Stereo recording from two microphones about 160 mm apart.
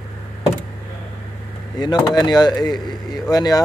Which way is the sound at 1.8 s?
25° left (ahead or behind).